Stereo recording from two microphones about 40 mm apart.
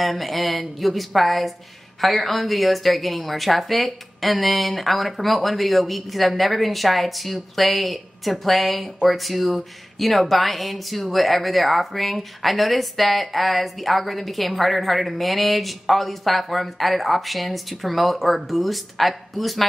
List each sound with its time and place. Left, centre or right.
0.2 s a woman's voice: centre